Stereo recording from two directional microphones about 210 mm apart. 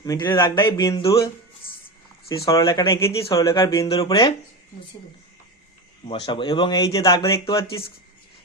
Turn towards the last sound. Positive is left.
turn(degrees=15)  # may be behind; listen again after turning